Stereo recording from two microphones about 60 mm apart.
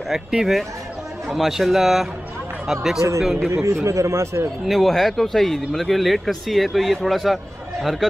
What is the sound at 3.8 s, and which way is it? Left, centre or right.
Speech, right.